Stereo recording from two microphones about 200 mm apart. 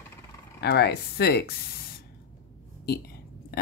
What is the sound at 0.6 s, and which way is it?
Speech, 50° left (ahead or behind).